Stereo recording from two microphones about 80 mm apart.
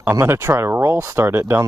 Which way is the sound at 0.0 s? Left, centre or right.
Right.